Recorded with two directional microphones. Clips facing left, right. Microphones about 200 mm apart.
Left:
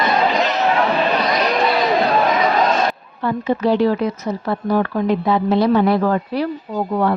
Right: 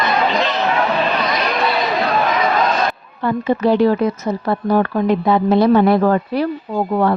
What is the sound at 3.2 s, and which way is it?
Speech, 55° right (ahead or behind).